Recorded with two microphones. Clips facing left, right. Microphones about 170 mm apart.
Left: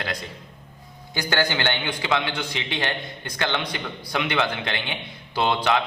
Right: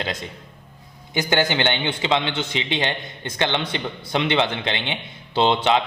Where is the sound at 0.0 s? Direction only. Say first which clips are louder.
Right 2 dB; 25° right (ahead or behind).